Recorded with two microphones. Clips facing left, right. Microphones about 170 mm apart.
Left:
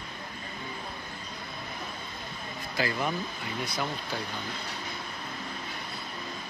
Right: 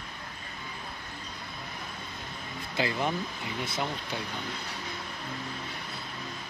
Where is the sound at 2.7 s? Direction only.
25° right (ahead or behind).